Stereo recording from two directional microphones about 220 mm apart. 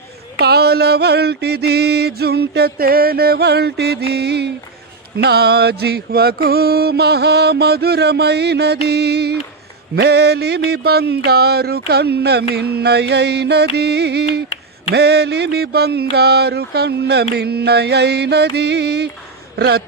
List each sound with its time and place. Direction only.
0.4 s music: 45° right (ahead or behind)
19.5 s speech: 45° right (ahead or behind)